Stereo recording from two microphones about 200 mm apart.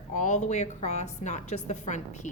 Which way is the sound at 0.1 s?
35° left (ahead or behind).